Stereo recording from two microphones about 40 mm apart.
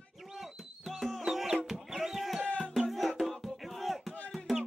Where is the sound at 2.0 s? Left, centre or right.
Centre.